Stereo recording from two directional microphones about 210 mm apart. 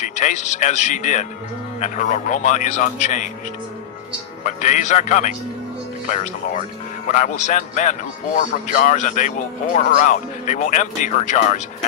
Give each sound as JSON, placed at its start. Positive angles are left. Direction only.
{"t": 0.0, "sound": "speech", "side_deg": 35}
{"t": 4.4, "sound": "speech", "side_deg": 35}